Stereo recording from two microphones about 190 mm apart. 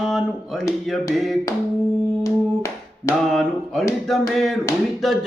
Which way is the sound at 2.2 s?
15° left (ahead or behind).